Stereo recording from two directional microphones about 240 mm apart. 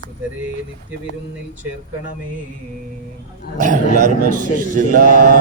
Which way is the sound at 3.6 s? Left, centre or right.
Right.